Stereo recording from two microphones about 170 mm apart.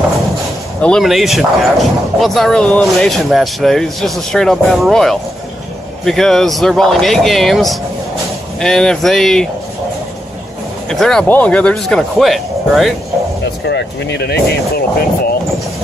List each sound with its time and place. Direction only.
0.7 s speech: 5° left (ahead or behind)
10.9 s speech: 5° left (ahead or behind)
13.7 s speech: 80° left